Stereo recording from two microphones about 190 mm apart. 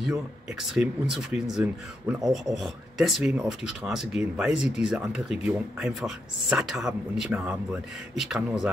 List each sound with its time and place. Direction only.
0.5 s speech: centre (ahead or behind)